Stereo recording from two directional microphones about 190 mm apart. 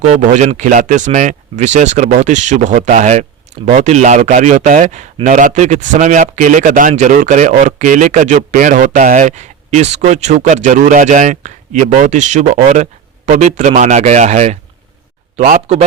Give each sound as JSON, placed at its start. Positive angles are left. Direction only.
{"t": 0.1, "sound": "speech", "side_deg": -40}